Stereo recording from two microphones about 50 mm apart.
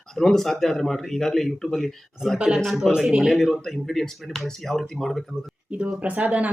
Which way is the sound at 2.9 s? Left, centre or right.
Centre.